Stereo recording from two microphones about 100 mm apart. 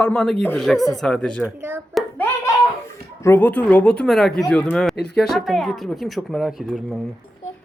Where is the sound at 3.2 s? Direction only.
20° left (ahead or behind).